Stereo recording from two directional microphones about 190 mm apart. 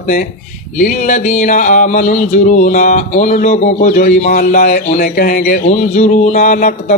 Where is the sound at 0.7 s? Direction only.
45° left (ahead or behind).